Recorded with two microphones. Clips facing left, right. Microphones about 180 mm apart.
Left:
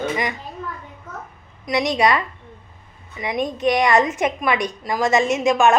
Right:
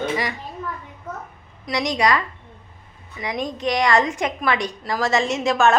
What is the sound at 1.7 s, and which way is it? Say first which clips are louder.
Speech: left 2 dB; 20° left (ahead or behind).